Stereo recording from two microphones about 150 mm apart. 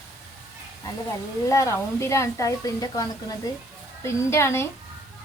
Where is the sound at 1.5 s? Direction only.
20° left (ahead or behind).